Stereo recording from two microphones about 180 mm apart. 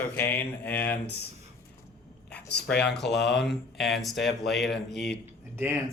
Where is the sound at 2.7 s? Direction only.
70° left (ahead or behind).